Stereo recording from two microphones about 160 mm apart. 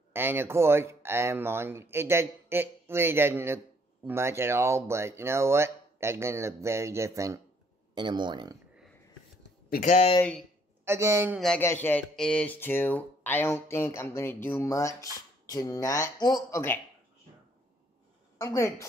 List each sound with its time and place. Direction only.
0.1 s speech: 15° right (ahead or behind); by 8.5 s 30° right (ahead or behind)
9.7 s speech: 55° left (ahead or behind)
10.9 s speech: 20° right (ahead or behind)
11.3 s speech: centre (ahead or behind)
11.6 s speech: 15° left (ahead or behind)
18.4 s speech: 20° left (ahead or behind)